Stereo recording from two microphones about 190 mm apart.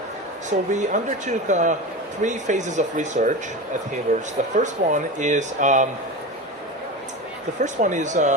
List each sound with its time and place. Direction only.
0.5 s speech: 40° right (ahead or behind)
7.6 s speech: 40° right (ahead or behind)